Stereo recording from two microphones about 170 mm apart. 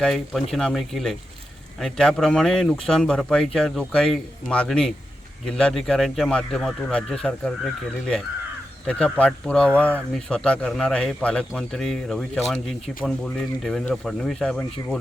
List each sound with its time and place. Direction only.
0.0 s speech: centre (ahead or behind)
8.9 s speech: 5° left (ahead or behind)